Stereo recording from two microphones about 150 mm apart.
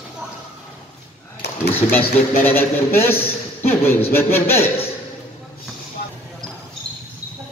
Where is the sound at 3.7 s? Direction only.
15° left (ahead or behind).